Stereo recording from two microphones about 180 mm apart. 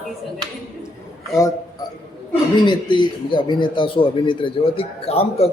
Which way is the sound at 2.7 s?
25° left (ahead or behind).